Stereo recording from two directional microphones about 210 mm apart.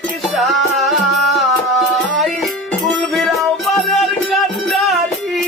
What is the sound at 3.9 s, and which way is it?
Music, centre (ahead or behind).